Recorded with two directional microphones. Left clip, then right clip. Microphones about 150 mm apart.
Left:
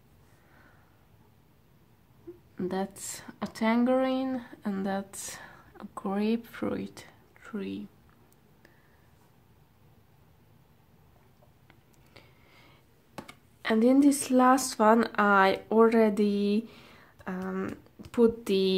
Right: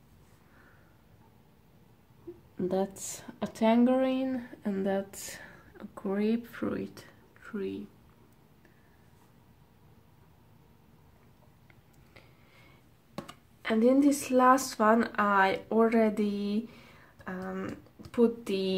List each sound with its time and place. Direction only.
2.5 s speech: 30° left (ahead or behind)
12.1 s a sound: 20° left (ahead or behind)
13.6 s speech: 25° left (ahead or behind)